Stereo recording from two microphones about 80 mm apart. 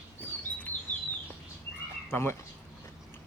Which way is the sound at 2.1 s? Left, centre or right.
Left.